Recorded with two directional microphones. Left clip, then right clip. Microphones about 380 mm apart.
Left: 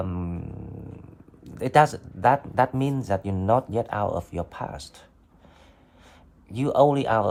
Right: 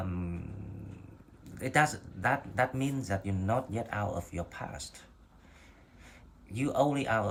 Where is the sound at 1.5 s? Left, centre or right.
Centre.